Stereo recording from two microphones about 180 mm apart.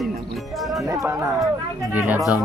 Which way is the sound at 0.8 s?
20° right (ahead or behind).